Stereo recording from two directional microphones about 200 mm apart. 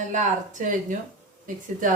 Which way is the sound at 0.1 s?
40° right (ahead or behind).